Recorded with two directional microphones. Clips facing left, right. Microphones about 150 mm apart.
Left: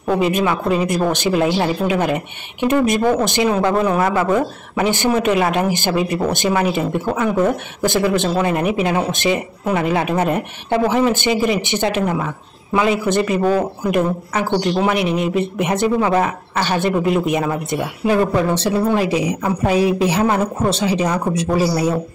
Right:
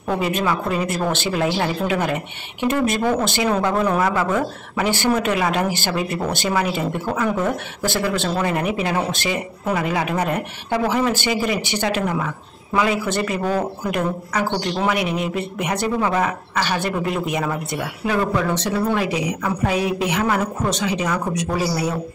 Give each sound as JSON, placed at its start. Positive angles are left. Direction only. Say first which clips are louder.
{"t": 0.2, "sound": "speech", "louder": "left 4 dB", "side_deg": 20}
{"t": 4.2, "sound": "speech", "louder": "left 4 dB", "side_deg": 20}